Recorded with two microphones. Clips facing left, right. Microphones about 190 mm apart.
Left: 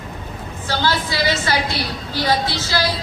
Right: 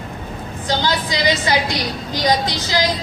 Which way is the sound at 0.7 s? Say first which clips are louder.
Right 1 dB; 15° right (ahead or behind).